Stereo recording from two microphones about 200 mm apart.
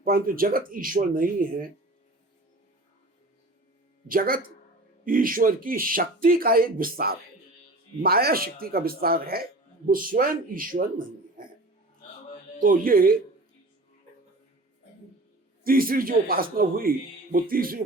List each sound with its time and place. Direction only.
0.0 s speech: 45° right (ahead or behind)
4.1 s speech: 45° right (ahead or behind)
12.5 s speech: 45° right (ahead or behind)
15.6 s speech: 45° right (ahead or behind)